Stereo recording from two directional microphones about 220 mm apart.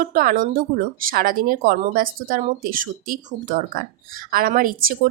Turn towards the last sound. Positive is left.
turn(degrees=-40)  # may be behind; listen again after turning